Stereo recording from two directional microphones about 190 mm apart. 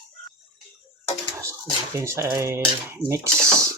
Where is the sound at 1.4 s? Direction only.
15° right (ahead or behind).